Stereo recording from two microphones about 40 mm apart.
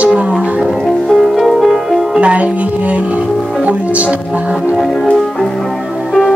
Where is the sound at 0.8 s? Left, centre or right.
Centre.